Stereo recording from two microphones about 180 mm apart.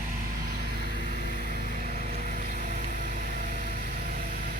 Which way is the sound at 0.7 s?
60° right (ahead or behind).